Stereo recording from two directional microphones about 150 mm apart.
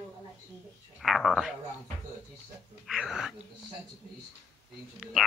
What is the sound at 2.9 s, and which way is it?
Speech, 5° right (ahead or behind).